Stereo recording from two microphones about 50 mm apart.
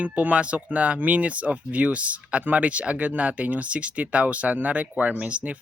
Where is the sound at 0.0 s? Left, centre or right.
Right.